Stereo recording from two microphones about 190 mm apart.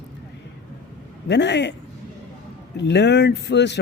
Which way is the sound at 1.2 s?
65° left (ahead or behind).